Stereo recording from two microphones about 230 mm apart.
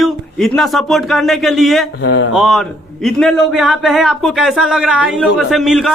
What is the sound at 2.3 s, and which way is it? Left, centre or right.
A man's voice, centre.